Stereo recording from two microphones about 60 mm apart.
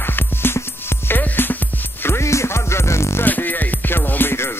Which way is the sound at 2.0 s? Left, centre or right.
Left.